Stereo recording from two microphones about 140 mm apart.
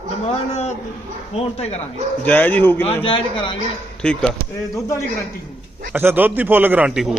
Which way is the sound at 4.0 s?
5° left (ahead or behind).